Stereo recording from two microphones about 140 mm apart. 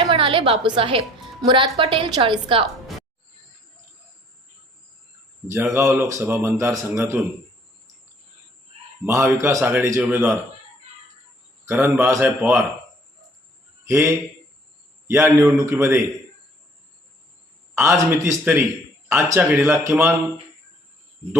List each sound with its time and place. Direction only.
0.0 s a woman's voice: 40° right (ahead or behind)
5.5 s a man's voice: 20° right (ahead or behind)
9.0 s a man's voice: 20° right (ahead or behind)
11.7 s a man's voice: 15° right (ahead or behind)
13.8 s a man's voice: 20° right (ahead or behind)
18.1 s a man's voice: 20° right (ahead or behind)